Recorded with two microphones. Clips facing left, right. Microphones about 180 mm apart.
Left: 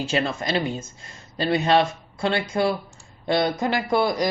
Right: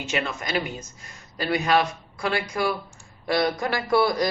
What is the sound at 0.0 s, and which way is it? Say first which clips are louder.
Speech: left 4 dB; 30° left (ahead or behind).